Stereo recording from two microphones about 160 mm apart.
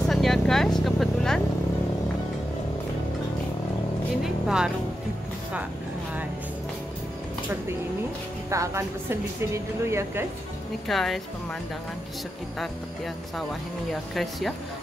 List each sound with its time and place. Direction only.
0.0 s vehicle: centre (ahead or behind)
4.2 s music: 5° right (ahead or behind)
8.5 s speech: 20° right (ahead or behind)
10.9 s speech: centre (ahead or behind)
14.1 s speech: centre (ahead or behind)